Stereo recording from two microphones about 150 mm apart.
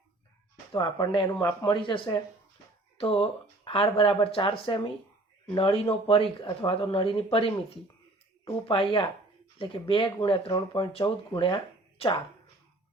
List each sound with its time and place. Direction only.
0.7 s speech: 25° left (ahead or behind)
8.6 s speech: 35° left (ahead or behind)